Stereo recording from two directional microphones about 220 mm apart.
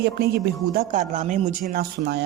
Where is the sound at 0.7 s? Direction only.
40° right (ahead or behind).